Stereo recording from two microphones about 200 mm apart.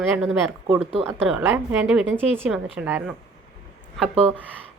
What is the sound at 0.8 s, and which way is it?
Speech, 30° right (ahead or behind).